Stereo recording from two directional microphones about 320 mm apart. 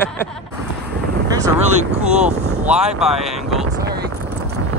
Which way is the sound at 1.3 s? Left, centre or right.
Centre.